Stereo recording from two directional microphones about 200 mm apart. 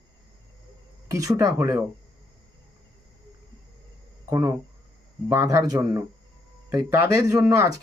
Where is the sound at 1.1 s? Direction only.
15° right (ahead or behind).